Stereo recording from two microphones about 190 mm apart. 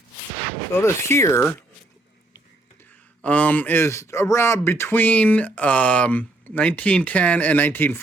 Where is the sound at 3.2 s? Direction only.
10° left (ahead or behind).